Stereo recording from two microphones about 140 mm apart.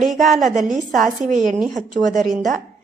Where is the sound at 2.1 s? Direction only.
70° right (ahead or behind).